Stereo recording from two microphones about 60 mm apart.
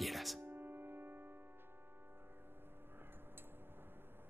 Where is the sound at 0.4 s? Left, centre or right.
Right.